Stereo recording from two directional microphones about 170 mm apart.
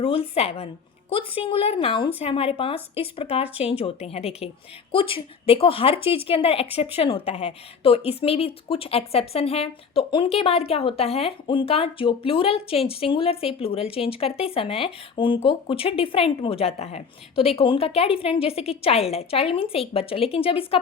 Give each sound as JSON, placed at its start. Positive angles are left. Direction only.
{"t": 0.0, "sound": "a woman's voice", "side_deg": 35}